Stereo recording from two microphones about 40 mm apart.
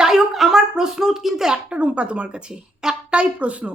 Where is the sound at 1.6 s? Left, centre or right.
Right.